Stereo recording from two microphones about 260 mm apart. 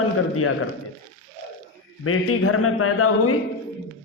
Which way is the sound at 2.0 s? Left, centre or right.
Left.